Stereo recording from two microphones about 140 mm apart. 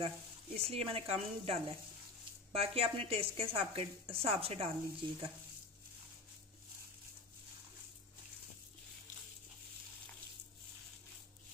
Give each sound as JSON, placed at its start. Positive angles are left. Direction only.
{"t": 0.0, "sound": "a woman's voice", "side_deg": -45}